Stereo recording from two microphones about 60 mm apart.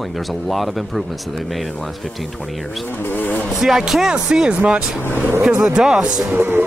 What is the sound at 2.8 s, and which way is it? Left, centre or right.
Speech, left.